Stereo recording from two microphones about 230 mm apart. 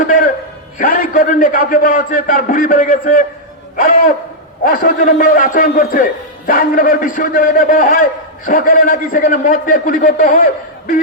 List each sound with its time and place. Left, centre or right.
0.0 s a sound: left
0.8 s a man's voice: left
4.6 s a man's voice: left